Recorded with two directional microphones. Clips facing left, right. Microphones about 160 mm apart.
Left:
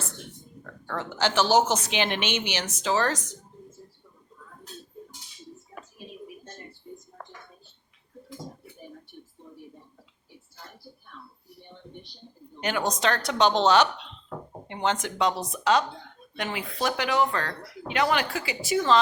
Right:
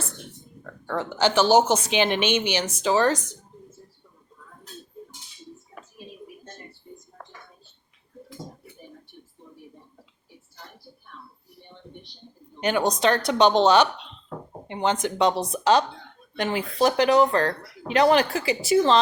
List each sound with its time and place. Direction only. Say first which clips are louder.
0.6 s speech: right 5 dB; 10° right (ahead or behind)
12.5 s speech: right 5 dB; 20° right (ahead or behind)